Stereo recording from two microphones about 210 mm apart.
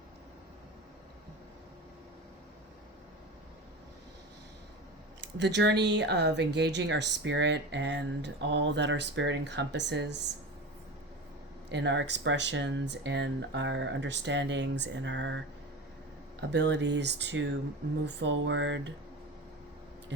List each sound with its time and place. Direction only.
5.4 s speech: 55° right (ahead or behind)
11.7 s speech: 55° right (ahead or behind)
16.5 s speech: 55° right (ahead or behind)